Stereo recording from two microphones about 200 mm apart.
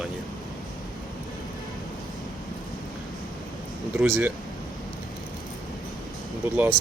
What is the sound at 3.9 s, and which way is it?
Speech, 5° right (ahead or behind).